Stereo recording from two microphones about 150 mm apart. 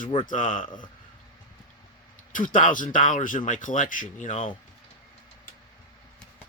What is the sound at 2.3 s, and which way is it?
Speech, 60° left (ahead or behind).